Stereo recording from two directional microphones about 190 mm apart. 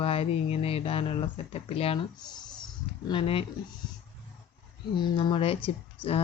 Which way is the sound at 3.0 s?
30° left (ahead or behind).